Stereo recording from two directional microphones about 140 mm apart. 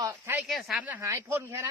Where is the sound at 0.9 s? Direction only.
20° right (ahead or behind).